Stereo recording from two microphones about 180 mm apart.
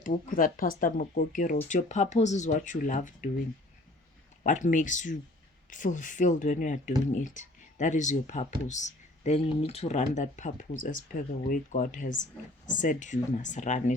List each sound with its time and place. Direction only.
0.0 s speech: 50° left (ahead or behind)
4.4 s speech: 45° left (ahead or behind)